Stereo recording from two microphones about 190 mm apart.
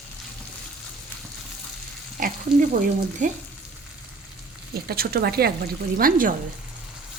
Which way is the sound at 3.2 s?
40° right (ahead or behind).